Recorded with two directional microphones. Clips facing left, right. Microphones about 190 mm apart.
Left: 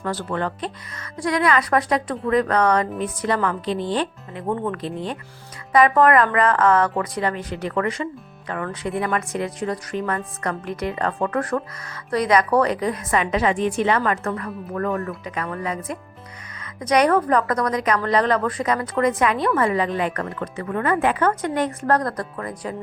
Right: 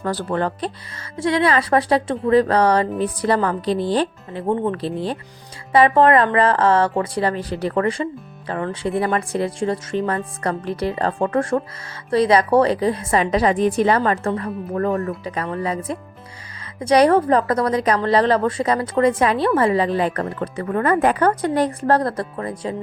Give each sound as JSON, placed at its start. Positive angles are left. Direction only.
{"t": 0.0, "sound": "a woman's voice", "side_deg": -35}